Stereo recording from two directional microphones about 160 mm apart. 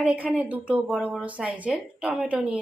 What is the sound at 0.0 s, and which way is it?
A woman's voice, 10° right (ahead or behind).